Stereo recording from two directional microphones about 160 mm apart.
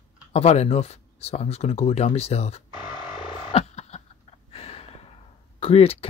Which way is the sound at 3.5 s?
40° left (ahead or behind).